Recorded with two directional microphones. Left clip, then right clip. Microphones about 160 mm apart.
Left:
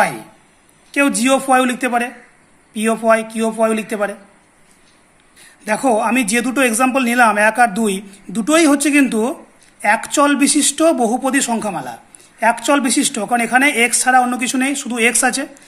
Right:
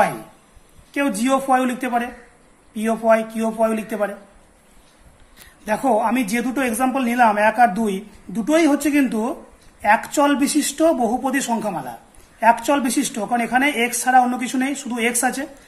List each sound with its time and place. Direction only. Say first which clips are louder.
0.9 s speech: left 5 dB; 25° left (ahead or behind)
5.7 s speech: left 3 dB; 25° left (ahead or behind)